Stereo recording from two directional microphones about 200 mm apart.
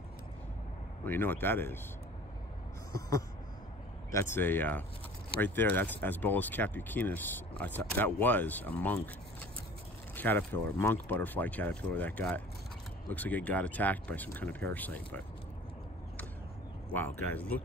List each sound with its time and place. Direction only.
1.0 s speech: 10° left (ahead or behind)
4.1 s speech: 10° left (ahead or behind)
16.9 s speech: 10° left (ahead or behind)